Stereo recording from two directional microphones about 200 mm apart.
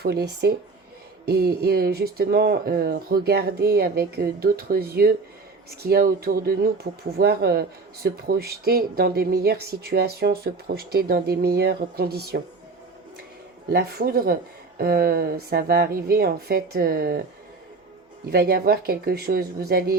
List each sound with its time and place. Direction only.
0.0 s speech: 55° right (ahead or behind)
13.7 s speech: 50° right (ahead or behind)
18.3 s speech: 50° right (ahead or behind)